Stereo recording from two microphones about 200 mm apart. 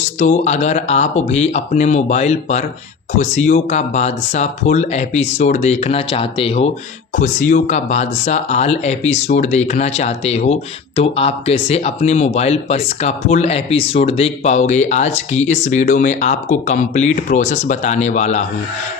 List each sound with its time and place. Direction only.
0.2 s speech: 35° left (ahead or behind)